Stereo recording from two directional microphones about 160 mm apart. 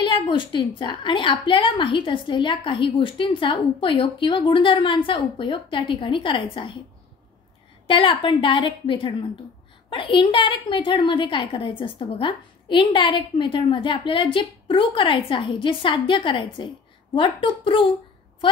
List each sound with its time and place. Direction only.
0.0 s a woman's voice: 30° left (ahead or behind)
7.8 s a woman's voice: 35° left (ahead or behind)